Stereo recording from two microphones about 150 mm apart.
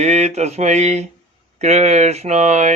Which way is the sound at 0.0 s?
45° right (ahead or behind).